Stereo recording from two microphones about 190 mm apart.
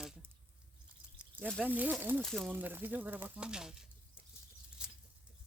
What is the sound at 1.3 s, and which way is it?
Speech, 10° right (ahead or behind).